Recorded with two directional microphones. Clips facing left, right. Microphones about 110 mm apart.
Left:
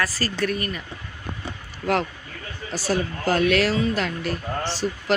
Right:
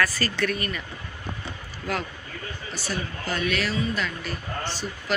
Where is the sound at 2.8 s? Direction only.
90° left.